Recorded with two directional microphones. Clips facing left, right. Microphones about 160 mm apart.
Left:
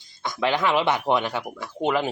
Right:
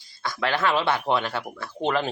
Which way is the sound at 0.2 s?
15° left (ahead or behind).